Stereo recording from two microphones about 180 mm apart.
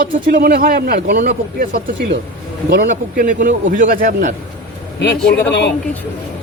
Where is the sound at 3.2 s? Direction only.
45° right (ahead or behind).